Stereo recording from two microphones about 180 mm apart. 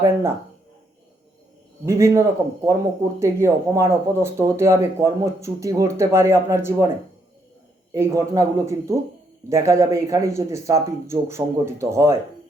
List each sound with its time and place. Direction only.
0.0 s speech: 15° right (ahead or behind)
1.8 s speech: 15° right (ahead or behind)
7.9 s speech: 20° right (ahead or behind)